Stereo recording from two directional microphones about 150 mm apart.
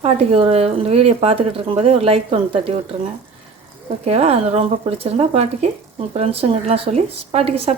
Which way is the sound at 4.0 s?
45° right (ahead or behind).